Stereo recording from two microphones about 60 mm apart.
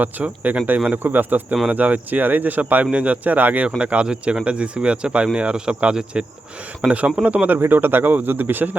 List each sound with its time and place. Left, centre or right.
0.0 s speech: right
7.7 s speech: right